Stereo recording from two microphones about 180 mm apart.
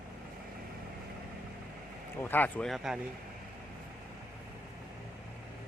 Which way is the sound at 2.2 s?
10° left (ahead or behind).